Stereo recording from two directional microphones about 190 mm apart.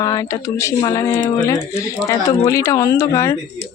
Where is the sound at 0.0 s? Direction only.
20° left (ahead or behind).